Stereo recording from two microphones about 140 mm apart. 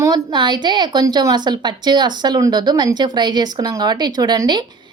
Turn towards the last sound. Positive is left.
turn(degrees=-30)  # may be behind; listen again after turning